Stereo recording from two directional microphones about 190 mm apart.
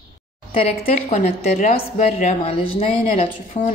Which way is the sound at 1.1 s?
35° left (ahead or behind).